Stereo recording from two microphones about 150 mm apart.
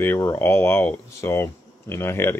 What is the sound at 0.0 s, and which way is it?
Speech, 15° left (ahead or behind).